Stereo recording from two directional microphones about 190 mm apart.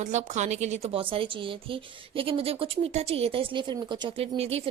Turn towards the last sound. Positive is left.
turn(degrees=-30)  # may be behind; listen again after turning